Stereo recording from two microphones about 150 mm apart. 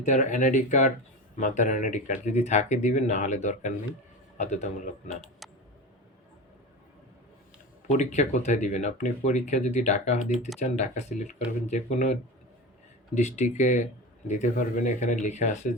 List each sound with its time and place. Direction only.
0.0 s speech: 55° left (ahead or behind)
7.9 s speech: 50° left (ahead or behind)
13.1 s speech: 50° left (ahead or behind)